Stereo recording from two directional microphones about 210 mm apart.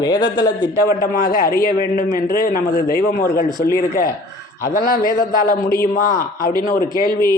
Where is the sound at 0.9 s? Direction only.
40° left (ahead or behind).